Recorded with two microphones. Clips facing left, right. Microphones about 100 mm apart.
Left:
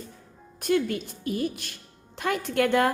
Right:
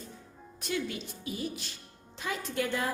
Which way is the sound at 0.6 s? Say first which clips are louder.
Left 9 dB; 50° left (ahead or behind).